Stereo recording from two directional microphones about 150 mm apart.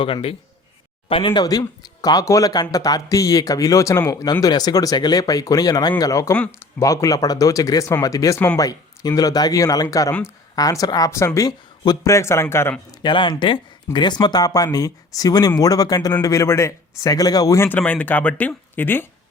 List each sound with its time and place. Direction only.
0.0 s a man's voice: 40° left (ahead or behind); by 6.3 s 20° left (ahead or behind)
6.3 s speech: 10° left (ahead or behind)
6.8 s speech: 20° left (ahead or behind)
13.0 s a man's voice: 30° left (ahead or behind); by 19.0 s 15° left (ahead or behind)